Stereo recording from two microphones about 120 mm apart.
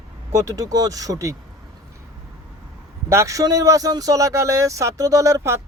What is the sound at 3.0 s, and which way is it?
Speech, 25° right (ahead or behind).